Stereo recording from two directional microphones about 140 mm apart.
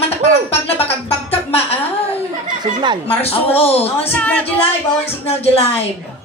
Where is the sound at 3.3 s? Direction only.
45° left (ahead or behind).